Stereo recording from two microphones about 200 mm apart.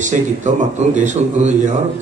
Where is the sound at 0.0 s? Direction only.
40° right (ahead or behind).